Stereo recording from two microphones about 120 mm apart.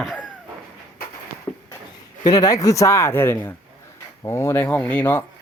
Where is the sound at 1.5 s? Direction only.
30° left (ahead or behind).